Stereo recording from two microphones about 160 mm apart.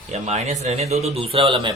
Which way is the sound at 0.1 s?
45° right (ahead or behind).